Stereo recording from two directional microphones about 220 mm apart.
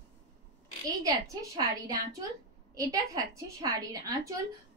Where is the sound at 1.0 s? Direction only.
15° right (ahead or behind).